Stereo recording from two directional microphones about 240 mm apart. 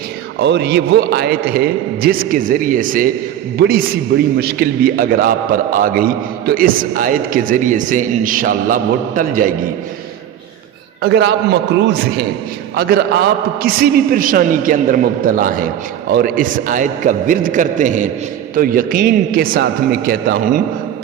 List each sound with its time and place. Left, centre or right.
0.3 s a man's voice: right
4.4 s a man's voice: right
11.0 s a man's voice: right
13.6 s a man's voice: right